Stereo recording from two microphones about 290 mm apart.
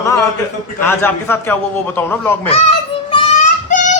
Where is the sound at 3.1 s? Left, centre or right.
Left.